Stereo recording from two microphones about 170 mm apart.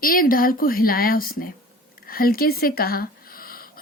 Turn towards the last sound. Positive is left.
turn(degrees=60)  # may be behind; listen again after turning